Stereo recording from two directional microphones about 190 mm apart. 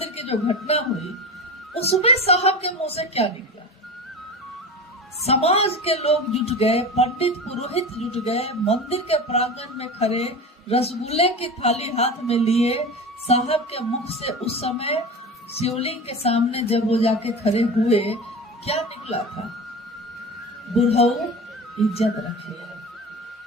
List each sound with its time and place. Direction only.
0.0 s a sound: 35° left (ahead or behind)
1.7 s speech: 30° left (ahead or behind)
5.2 s speech: 30° left (ahead or behind)
20.7 s speech: 30° left (ahead or behind)